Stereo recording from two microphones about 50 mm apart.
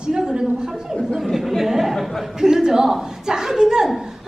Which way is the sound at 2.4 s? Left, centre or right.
Centre.